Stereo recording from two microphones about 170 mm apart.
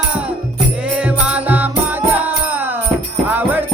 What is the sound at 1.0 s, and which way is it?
Music, 5° right (ahead or behind).